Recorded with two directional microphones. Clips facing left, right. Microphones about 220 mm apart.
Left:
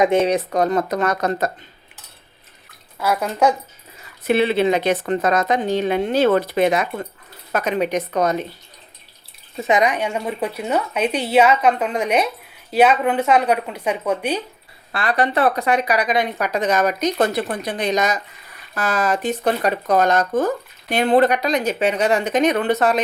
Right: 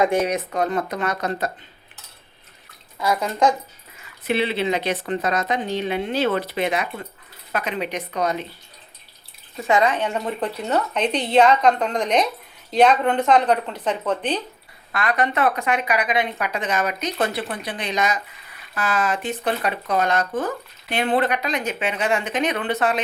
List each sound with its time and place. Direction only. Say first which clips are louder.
0.0 s speech: left 4 dB; 25° left (ahead or behind); by 1.5 s 45° left (ahead or behind)
3.0 s speech: left 2 dB; 5° left (ahead or behind)
4.2 s speech: left 5 dB; 45° left (ahead or behind)
9.6 s speech: left 1 dB; 15° left (ahead or behind)
14.9 s speech: left 2 dB; 35° left (ahead or behind)